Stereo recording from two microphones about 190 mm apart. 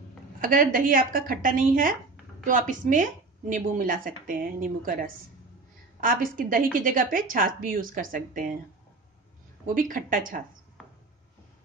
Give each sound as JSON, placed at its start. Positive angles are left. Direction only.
{"t": 0.4, "sound": "speech", "side_deg": -45}
{"t": 9.8, "sound": "speech", "side_deg": -45}
{"t": 10.8, "sound": "a sound", "side_deg": 5}